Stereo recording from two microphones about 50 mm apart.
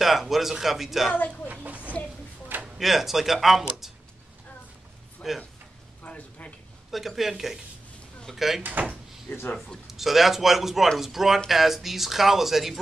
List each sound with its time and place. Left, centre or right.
0.0 s speech: centre
1.1 s speech: left
1.5 s a sound: right
2.8 s speech: centre
5.2 s speech: centre
6.0 s a sound: left
6.9 s speech: centre
9.3 s speech: left
9.8 s speech: centre